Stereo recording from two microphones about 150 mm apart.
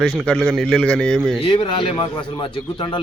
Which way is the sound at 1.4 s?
35° left (ahead or behind).